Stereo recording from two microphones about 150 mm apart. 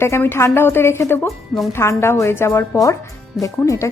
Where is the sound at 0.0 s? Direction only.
15° left (ahead or behind).